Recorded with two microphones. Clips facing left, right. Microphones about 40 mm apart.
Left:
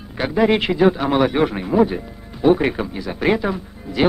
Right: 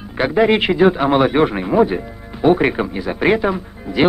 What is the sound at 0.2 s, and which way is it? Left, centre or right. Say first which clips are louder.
Speech: right 3 dB; right.